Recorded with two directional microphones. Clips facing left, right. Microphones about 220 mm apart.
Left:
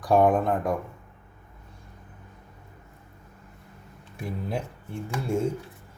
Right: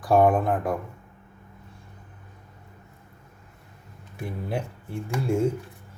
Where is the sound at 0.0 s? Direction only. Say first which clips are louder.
Right 1 dB; centre (ahead or behind).